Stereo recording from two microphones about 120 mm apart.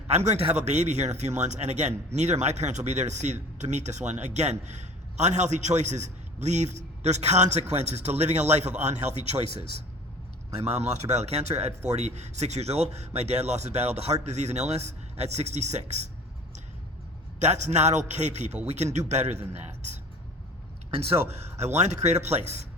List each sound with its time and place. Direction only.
0.1 s a man's voice: 65° right (ahead or behind)
10.7 s a man's voice: 65° right (ahead or behind)
17.4 s a man's voice: 70° right (ahead or behind)
20.9 s a man's voice: 55° right (ahead or behind)